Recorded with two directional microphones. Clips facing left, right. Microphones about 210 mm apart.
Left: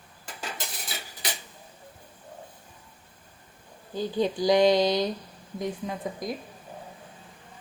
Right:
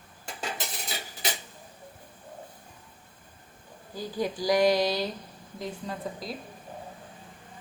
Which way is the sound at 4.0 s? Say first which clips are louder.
Left 5 dB; 25° left (ahead or behind).